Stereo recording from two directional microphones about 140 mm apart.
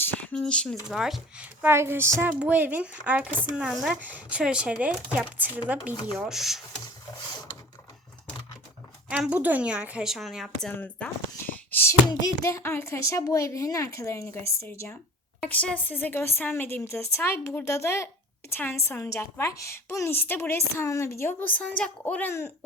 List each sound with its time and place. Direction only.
0.0 s speech: 10° left (ahead or behind)
1.6 s speech: 15° right (ahead or behind)
9.0 s speech: 10° right (ahead or behind)
10.7 s a child's voice: 10° left (ahead or behind)